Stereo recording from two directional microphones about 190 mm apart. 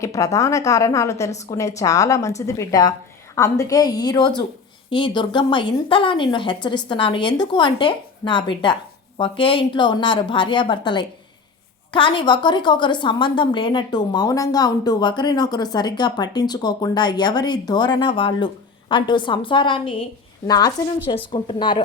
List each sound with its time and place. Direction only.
0.0 s a woman's voice: 15° left (ahead or behind)